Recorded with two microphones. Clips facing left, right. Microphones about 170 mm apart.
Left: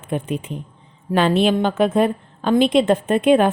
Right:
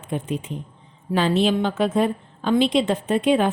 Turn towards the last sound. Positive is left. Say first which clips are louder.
# left 4 dB
turn(degrees=55)  # may be behind; listen again after turning